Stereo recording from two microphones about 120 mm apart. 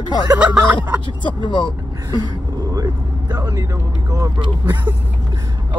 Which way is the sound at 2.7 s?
30° right (ahead or behind).